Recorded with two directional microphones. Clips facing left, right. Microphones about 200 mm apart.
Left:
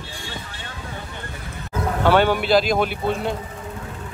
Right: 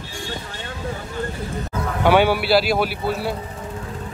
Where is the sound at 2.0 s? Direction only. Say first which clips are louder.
Right 1 dB; 10° right (ahead or behind).